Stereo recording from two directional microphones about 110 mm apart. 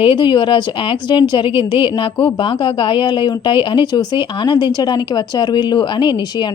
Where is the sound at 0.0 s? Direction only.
50° left (ahead or behind).